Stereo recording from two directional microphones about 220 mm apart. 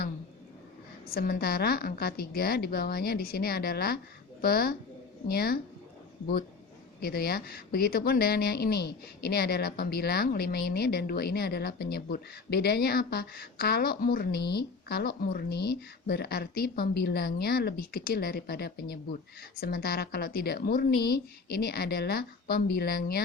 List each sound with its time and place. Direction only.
1.0 s a woman's voice: 40° left (ahead or behind)
7.0 s a woman's voice: 45° left (ahead or behind)